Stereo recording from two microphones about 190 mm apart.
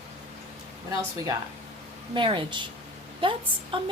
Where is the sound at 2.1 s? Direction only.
25° right (ahead or behind).